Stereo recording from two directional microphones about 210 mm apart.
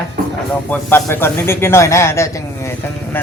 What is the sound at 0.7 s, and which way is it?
A man's voice, 10° left (ahead or behind).